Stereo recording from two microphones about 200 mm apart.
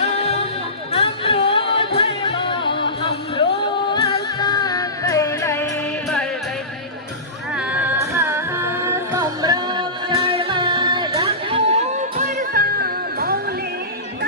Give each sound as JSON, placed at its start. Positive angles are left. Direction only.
{"t": 0.0, "sound": "music", "side_deg": 30}
{"t": 3.8, "sound": "music", "side_deg": 20}
{"t": 7.5, "sound": "music", "side_deg": -5}